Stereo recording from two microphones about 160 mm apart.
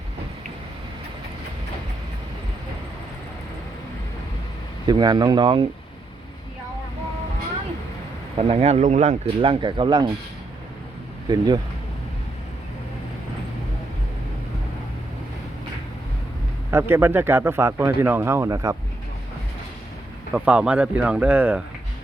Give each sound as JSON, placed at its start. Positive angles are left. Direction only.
{"t": 4.9, "sound": "speech", "side_deg": -25}
{"t": 8.4, "sound": "speech", "side_deg": -40}
{"t": 11.3, "sound": "speech", "side_deg": -25}
{"t": 16.7, "sound": "speech", "side_deg": -15}
{"t": 20.3, "sound": "speech", "side_deg": -10}